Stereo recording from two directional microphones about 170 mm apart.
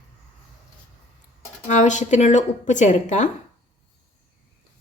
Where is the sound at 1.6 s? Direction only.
45° left (ahead or behind).